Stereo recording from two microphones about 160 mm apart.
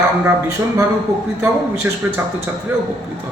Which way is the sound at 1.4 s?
15° right (ahead or behind).